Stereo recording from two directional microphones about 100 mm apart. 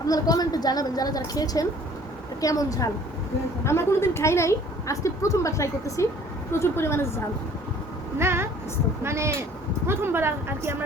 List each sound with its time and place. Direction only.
0.1 s a woman's voice: 40° left (ahead or behind)
8.2 s speech: 25° right (ahead or behind)